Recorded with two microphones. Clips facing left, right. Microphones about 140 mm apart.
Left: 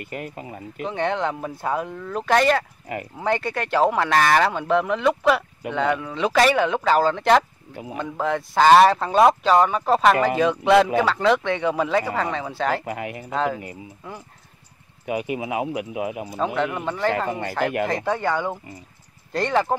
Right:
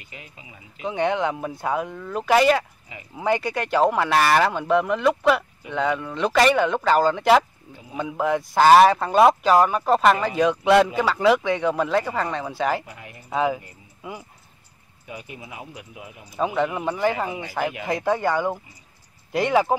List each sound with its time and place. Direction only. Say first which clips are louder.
0.0 s speech: left 12 dB; 55° left (ahead or behind)
0.8 s speech: right 1 dB; 5° right (ahead or behind)
7.7 s speech: left 5 dB; 70° left (ahead or behind)
8.0 s speech: right 2 dB; 5° right (ahead or behind)
12.8 s speech: left 12 dB; 70° left (ahead or behind)
13.3 s speech: right 2 dB; 10° right (ahead or behind)
15.0 s speech: left 12 dB; 75° left (ahead or behind)
16.3 s speech: right 2 dB; 5° right (ahead or behind)
17.3 s speech: left 5 dB; 60° left (ahead or behind)
18.0 s speech: right 1 dB; 5° right (ahead or behind)